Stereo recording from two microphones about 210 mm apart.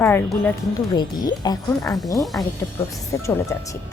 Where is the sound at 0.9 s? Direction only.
20° left (ahead or behind).